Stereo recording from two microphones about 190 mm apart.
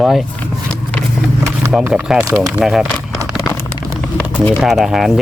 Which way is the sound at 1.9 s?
5° right (ahead or behind).